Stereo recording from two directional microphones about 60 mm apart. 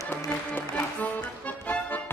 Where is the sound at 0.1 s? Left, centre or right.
Left.